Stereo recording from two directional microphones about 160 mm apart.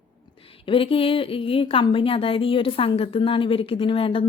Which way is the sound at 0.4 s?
35° left (ahead or behind).